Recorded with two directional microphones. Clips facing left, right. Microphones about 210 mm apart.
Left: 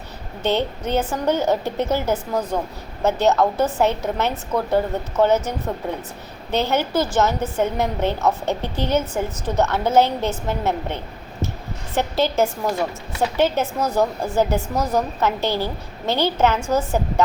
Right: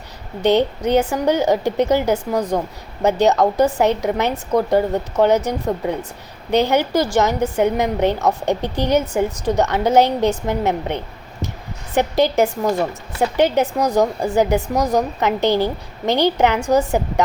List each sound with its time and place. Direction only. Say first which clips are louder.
0.4 s a woman's voice: right 6 dB; 15° right (ahead or behind)